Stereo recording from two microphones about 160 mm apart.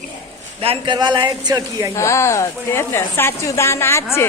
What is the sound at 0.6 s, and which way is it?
A man's voice, 35° right (ahead or behind).